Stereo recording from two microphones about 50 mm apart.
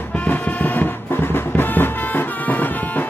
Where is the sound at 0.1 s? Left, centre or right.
Left.